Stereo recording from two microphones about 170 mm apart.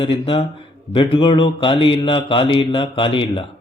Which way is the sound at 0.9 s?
30° left (ahead or behind).